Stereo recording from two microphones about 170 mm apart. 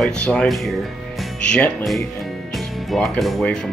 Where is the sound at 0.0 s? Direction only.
5° left (ahead or behind).